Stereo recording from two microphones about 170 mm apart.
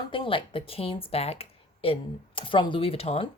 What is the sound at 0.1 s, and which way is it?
Speech, 30° left (ahead or behind).